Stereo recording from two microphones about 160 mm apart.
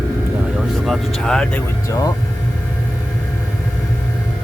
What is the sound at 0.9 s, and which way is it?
Speech, 5° left (ahead or behind).